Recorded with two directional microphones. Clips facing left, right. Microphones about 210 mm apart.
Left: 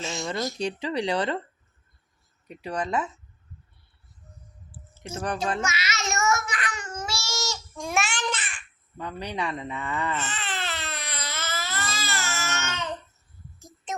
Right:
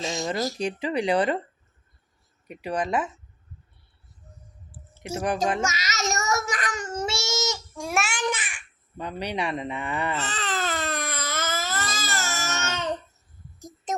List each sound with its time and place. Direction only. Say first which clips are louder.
0.0 s a sound: right 3 dB; 35° right (ahead or behind)
0.5 s speech: right 1 dB; 15° right (ahead or behind)
2.5 s speech: right 2 dB; 10° right (ahead or behind)
5.0 s speech: right 4 dB; 10° right (ahead or behind)
5.6 s babbling: right 2 dB; 40° right (ahead or behind)
7.0 s baby cry: right 5 dB; 20° right (ahead or behind)
7.8 s babbling: even; 5° right (ahead or behind)
10.2 s baby cry: right 3 dB; 40° right (ahead or behind)